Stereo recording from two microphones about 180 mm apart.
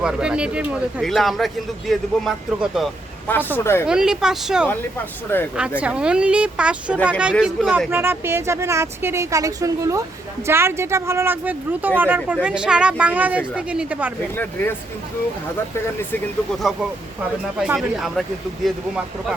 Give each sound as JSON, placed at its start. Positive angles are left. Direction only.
{"t": 0.0, "sound": "speech", "side_deg": -5}
{"t": 3.2, "sound": "speech", "side_deg": 10}
{"t": 3.8, "sound": "speech", "side_deg": -5}
{"t": 5.3, "sound": "speech", "side_deg": 10}
{"t": 5.8, "sound": "speech", "side_deg": -5}
{"t": 7.3, "sound": "speech", "side_deg": 5}
{"t": 7.9, "sound": "speech", "side_deg": -10}
{"t": 14.3, "sound": "speech", "side_deg": 10}
{"t": 17.6, "sound": "speech", "side_deg": -5}